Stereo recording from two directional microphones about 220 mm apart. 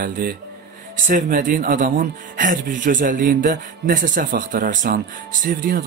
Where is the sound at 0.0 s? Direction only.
40° right (ahead or behind).